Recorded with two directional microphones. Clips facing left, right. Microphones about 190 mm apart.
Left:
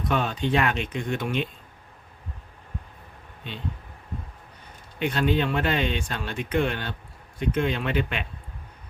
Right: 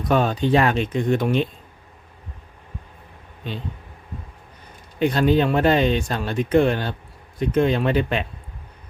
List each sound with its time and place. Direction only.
0.1 s speech: 40° right (ahead or behind)
4.9 s speech: 40° right (ahead or behind)